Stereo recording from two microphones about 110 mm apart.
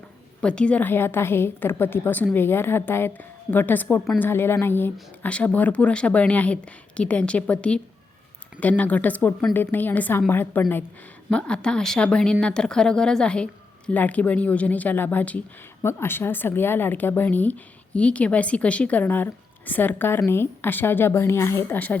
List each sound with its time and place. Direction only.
0.4 s speech: 10° left (ahead or behind)
11.3 s speech: 10° left (ahead or behind); by 21.8 s 25° left (ahead or behind)